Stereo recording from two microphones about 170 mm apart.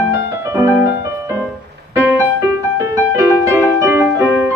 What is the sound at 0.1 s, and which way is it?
Music, 15° right (ahead or behind).